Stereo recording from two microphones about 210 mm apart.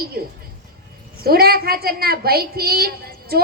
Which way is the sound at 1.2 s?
45° right (ahead or behind).